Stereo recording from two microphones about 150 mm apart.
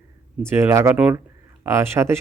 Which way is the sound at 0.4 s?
15° right (ahead or behind).